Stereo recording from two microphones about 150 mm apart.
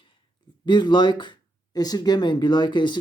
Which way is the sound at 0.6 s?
30° left (ahead or behind).